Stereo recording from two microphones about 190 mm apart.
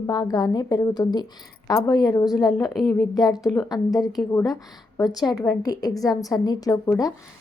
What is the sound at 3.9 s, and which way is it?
Speech, centre (ahead or behind).